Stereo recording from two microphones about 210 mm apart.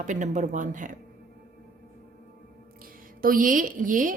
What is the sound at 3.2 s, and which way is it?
Speech, 40° right (ahead or behind).